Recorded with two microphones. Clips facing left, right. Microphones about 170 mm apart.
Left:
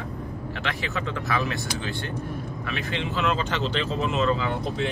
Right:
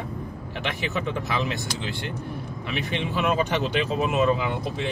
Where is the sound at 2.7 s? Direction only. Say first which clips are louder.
Right 2 dB; 15° right (ahead or behind).